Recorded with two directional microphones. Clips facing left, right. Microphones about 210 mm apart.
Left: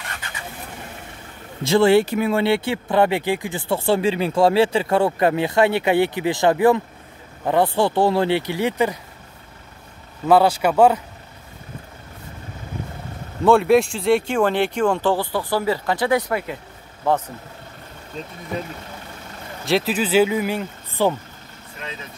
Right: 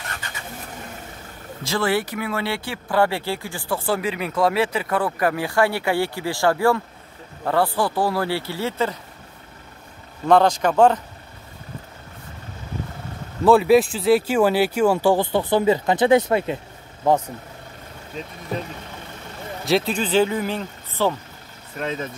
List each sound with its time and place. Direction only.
1.6 s speech: 25° left (ahead or behind)
10.2 s speech: 5° left (ahead or behind)
13.4 s speech: centre (ahead or behind)
15.3 s speech: 20° right (ahead or behind)
19.6 s speech: centre (ahead or behind)
21.7 s speech: 45° right (ahead or behind)